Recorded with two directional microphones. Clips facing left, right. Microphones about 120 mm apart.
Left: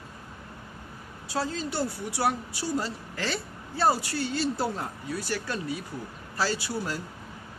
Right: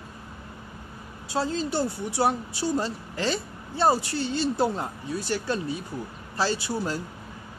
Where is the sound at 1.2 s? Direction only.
25° right (ahead or behind).